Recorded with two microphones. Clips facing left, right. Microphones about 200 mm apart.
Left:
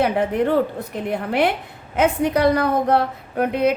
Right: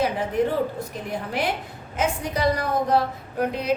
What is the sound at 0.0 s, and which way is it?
A woman's voice, 60° left (ahead or behind).